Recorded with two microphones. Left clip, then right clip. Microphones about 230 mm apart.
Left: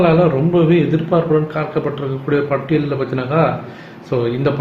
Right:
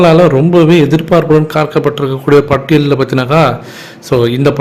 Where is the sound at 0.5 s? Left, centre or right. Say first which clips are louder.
Right 7 dB; right.